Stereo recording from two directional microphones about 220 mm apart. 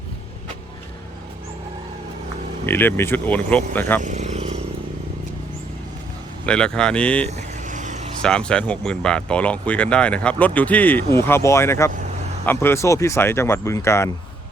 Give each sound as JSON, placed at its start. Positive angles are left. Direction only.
{"t": 2.6, "sound": "speech", "side_deg": 10}
{"t": 4.0, "sound": "vehicle", "side_deg": -30}
{"t": 6.4, "sound": "speech", "side_deg": 5}
{"t": 7.3, "sound": "vehicle", "side_deg": -30}
{"t": 8.2, "sound": "speech", "side_deg": 5}